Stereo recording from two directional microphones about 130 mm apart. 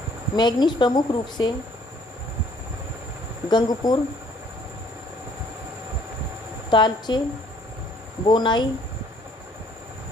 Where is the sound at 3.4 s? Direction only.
35° left (ahead or behind).